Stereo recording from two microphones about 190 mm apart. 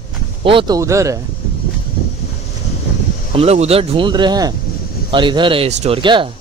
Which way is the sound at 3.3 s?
30° right (ahead or behind).